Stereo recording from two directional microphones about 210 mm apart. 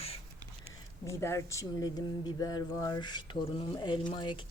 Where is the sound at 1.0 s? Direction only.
15° left (ahead or behind).